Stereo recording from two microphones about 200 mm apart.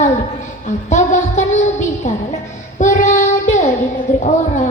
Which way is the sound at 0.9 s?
35° left (ahead or behind).